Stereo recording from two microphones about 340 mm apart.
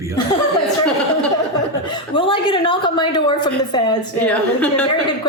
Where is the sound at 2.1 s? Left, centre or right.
Centre.